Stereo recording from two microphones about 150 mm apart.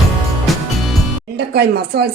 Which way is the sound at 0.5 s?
Centre (ahead or behind).